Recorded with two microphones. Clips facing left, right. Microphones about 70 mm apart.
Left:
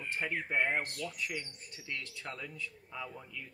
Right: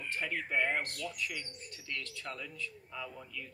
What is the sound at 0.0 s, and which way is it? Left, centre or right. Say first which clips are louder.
A man's voice: left 1 dB; left.